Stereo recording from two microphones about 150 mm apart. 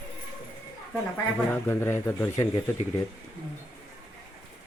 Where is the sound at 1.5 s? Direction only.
15° left (ahead or behind).